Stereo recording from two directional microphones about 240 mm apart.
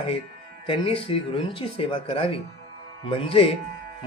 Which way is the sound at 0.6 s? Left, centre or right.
Left.